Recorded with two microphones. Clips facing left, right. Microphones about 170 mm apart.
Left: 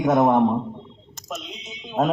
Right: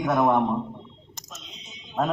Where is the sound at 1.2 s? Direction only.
75° left (ahead or behind).